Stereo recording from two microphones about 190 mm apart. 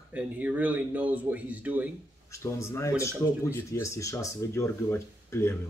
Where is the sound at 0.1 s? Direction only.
5° right (ahead or behind).